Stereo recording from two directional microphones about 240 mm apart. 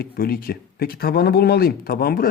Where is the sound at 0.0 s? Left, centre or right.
Left.